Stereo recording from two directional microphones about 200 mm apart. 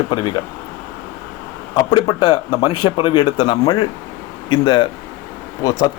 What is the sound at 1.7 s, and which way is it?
Speech, 20° left (ahead or behind).